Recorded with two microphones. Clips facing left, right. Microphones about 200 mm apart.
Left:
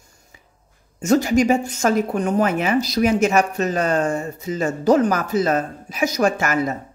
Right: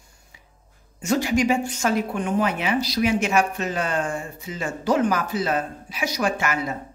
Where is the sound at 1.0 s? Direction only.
45° left (ahead or behind).